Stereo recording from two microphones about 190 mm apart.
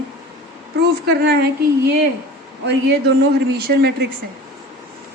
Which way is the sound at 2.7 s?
60° right (ahead or behind).